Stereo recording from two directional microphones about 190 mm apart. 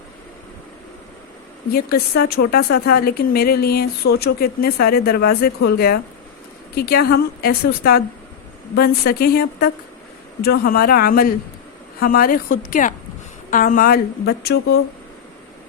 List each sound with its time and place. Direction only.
1.7 s a woman's voice: 55° left (ahead or behind)